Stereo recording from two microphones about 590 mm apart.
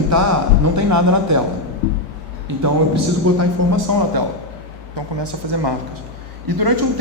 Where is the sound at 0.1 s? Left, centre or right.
Right.